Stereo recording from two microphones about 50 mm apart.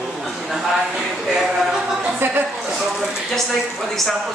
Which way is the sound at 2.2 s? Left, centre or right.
Right.